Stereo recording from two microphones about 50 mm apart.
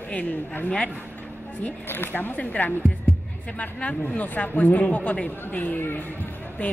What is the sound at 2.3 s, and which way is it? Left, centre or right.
Speech, left.